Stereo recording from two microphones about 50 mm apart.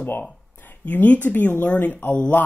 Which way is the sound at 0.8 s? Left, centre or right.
Left.